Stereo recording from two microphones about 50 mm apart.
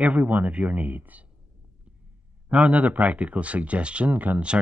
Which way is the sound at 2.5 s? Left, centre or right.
Right.